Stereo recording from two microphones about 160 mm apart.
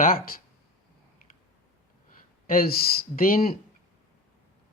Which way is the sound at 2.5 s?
65° left (ahead or behind).